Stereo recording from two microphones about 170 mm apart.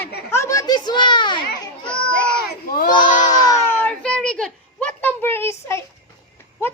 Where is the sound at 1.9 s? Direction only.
5° left (ahead or behind).